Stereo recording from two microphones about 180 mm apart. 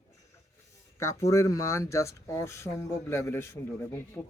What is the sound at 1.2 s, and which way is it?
Speech, 15° left (ahead or behind).